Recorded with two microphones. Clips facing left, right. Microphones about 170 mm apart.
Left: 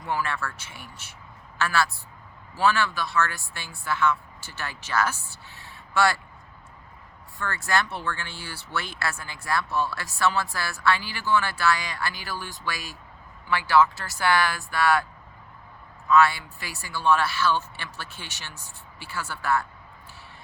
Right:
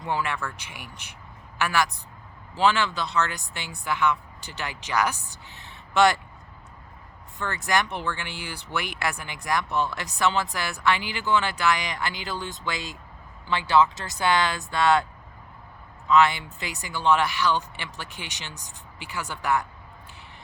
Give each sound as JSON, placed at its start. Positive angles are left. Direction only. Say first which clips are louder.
{"t": 0.0, "sound": "speech", "louder": "right 1 dB", "side_deg": -20}
{"t": 7.3, "sound": "speech", "louder": "right 1 dB", "side_deg": -20}
{"t": 16.0, "sound": "speech", "louder": "even", "side_deg": -20}